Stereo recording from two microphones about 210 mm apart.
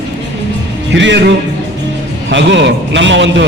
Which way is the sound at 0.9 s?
60° right (ahead or behind).